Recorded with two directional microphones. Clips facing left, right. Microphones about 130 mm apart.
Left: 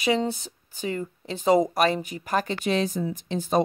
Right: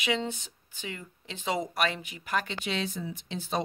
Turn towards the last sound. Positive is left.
turn(degrees=45)  # may be behind; listen again after turning